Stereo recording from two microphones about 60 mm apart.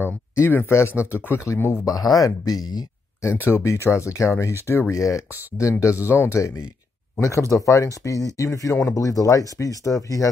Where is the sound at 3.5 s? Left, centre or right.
Left.